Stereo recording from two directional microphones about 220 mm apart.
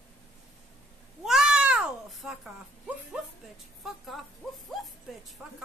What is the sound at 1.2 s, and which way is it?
Cat, 5° right (ahead or behind).